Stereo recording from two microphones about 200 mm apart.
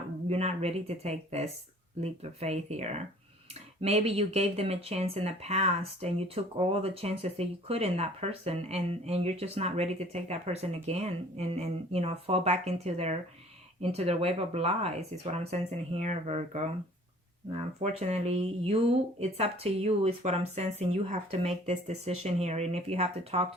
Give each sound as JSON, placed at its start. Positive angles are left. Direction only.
{"t": 0.3, "sound": "speech", "side_deg": -30}
{"t": 17.8, "sound": "speech", "side_deg": -35}